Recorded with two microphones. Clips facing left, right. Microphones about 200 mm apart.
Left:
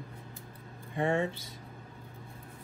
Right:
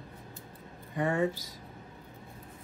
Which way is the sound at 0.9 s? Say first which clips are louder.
Right 1 dB; 25° left (ahead or behind).